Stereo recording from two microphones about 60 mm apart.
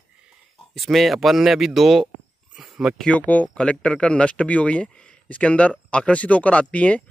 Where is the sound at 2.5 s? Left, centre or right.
Centre.